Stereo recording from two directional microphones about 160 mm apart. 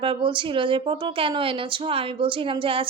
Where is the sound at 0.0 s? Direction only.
30° right (ahead or behind).